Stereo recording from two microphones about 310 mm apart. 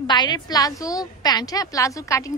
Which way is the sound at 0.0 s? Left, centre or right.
Centre.